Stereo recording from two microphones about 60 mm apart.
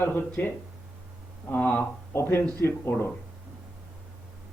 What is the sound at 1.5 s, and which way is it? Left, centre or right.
Speech, left.